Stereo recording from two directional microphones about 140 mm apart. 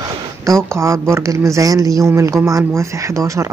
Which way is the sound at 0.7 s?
20° right (ahead or behind).